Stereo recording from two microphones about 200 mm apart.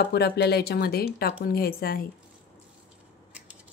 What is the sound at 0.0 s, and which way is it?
Speech, 55° left (ahead or behind).